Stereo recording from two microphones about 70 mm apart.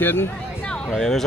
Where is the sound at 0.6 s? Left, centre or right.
Centre.